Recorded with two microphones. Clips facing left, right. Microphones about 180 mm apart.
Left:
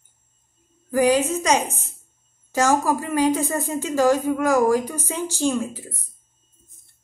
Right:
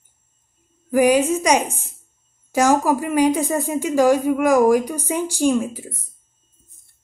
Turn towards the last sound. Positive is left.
turn(degrees=-15)  # may be behind; listen again after turning